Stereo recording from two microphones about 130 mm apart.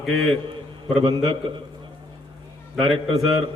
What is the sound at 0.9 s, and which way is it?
Speech, 40° right (ahead or behind).